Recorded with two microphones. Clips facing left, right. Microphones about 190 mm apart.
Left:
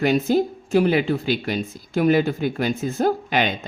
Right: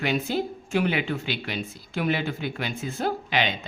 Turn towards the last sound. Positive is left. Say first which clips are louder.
# left 5 dB
turn(degrees=45)  # may be behind; listen again after turning